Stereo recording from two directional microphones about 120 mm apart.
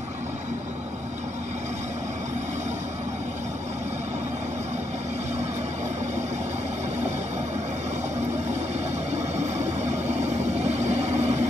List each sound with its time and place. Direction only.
9.1 s vehicle: 70° right (ahead or behind)